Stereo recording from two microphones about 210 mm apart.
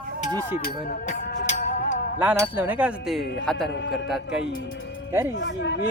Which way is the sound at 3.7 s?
55° left (ahead or behind).